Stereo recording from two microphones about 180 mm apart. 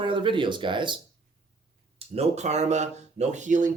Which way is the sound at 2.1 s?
40° right (ahead or behind).